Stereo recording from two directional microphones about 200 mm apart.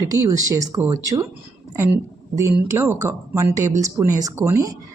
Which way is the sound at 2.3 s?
15° right (ahead or behind).